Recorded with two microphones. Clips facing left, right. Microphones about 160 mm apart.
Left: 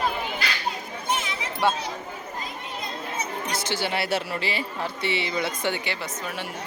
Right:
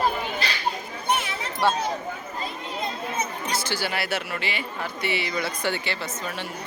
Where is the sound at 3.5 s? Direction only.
20° left (ahead or behind).